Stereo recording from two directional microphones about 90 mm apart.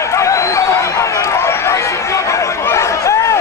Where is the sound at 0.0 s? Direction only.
35° left (ahead or behind).